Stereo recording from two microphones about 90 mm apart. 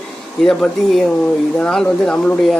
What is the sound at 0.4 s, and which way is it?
Speech, 5° left (ahead or behind).